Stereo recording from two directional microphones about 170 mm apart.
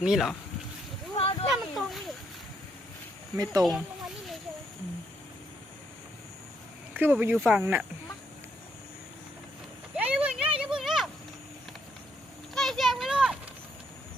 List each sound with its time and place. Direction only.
0.0 s speech: centre (ahead or behind)
1.1 s a sound: 35° left (ahead or behind)
1.7 s a sound: centre (ahead or behind)
3.3 s speech: 20° right (ahead or behind)
3.6 s speech: centre (ahead or behind)
6.9 s speech: 10° right (ahead or behind)
7.3 s speech: centre (ahead or behind)
10.0 s a sound: 10° right (ahead or behind)
12.5 s children playing: centre (ahead or behind)